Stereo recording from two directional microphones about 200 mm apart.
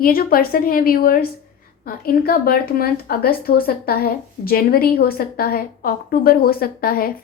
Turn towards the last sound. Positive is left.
turn(degrees=50)  # may be behind; listen again after turning